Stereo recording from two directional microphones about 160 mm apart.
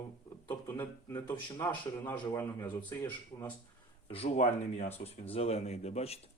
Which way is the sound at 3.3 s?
30° left (ahead or behind).